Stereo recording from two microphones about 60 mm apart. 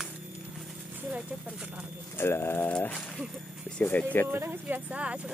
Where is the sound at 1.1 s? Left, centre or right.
Centre.